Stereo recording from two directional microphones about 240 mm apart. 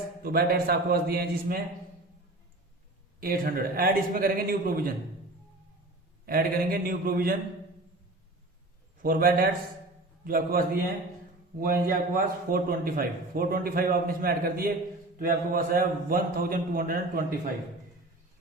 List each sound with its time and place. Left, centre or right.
0.2 s a man's voice: right
3.2 s a man's voice: right
6.2 s a man's voice: right
9.0 s a man's voice: right
11.6 s a man's voice: right